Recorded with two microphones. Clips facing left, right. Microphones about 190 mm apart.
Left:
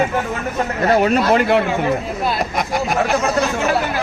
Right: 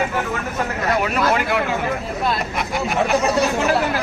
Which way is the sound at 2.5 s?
40° left (ahead or behind).